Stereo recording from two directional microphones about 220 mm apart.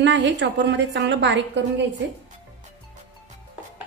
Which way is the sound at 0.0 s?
55° right (ahead or behind).